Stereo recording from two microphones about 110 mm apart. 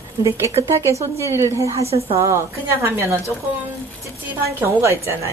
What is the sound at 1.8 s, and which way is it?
Speech, 70° right (ahead or behind).